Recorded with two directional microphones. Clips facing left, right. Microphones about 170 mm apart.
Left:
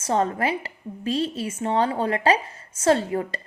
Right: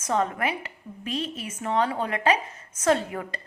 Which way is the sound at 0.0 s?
30° left (ahead or behind).